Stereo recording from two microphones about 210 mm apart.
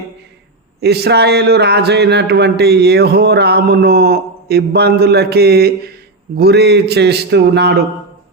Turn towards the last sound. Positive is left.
turn(degrees=-50)  # may be behind; listen again after turning